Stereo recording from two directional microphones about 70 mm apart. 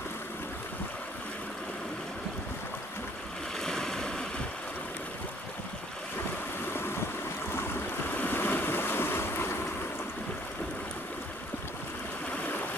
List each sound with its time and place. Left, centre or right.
3.5 s a sound: centre
6.7 s waves: left
8.1 s waves: left